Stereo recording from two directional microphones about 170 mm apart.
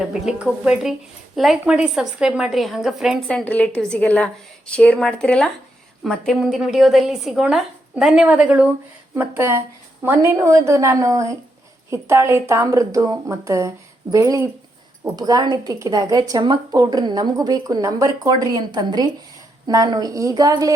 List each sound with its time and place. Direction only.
0.0 s a woman's voice: 5° right (ahead or behind); by 20.7 s 20° right (ahead or behind)